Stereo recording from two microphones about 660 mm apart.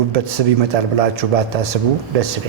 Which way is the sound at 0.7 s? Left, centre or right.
Right.